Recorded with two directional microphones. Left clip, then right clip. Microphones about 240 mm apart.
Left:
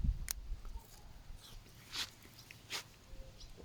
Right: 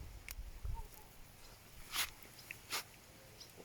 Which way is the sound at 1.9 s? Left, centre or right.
Centre.